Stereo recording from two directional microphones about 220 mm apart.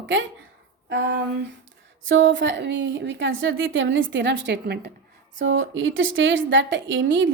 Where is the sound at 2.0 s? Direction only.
60° right (ahead or behind).